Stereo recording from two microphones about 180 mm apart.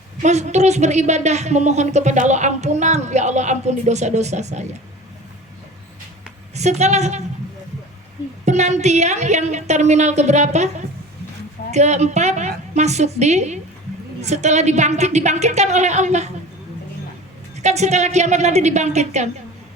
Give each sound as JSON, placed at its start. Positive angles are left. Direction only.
{"t": 0.2, "sound": "a woman's voice", "side_deg": -40}
{"t": 6.5, "sound": "a woman's voice", "side_deg": -40}
{"t": 8.4, "sound": "a woman's voice", "side_deg": -40}
{"t": 11.7, "sound": "a woman's voice", "side_deg": -40}
{"t": 17.6, "sound": "a woman's voice", "side_deg": -40}